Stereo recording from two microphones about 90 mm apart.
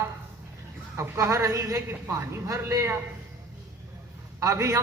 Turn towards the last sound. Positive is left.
turn(degrees=-35)  # may be behind; listen again after turning